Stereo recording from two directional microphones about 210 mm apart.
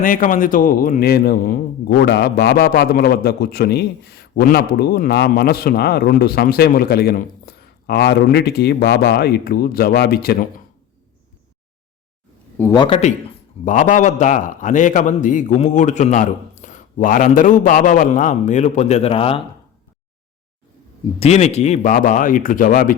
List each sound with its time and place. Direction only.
0.0 s a man's voice: 40° left (ahead or behind)
12.5 s a man's voice: 15° left (ahead or behind)
13.7 s a man's voice: 35° left (ahead or behind)
21.2 s a man's voice: 30° left (ahead or behind)